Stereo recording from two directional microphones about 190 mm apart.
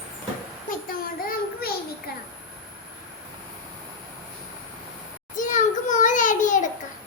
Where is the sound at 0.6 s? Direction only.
50° left (ahead or behind).